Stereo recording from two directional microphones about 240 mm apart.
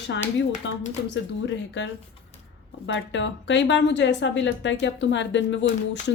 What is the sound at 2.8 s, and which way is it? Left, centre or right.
Speech, left.